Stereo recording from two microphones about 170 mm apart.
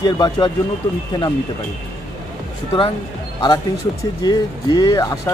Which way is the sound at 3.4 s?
25° left (ahead or behind).